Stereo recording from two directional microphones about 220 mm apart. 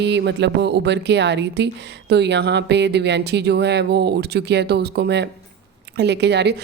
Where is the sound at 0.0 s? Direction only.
50° right (ahead or behind).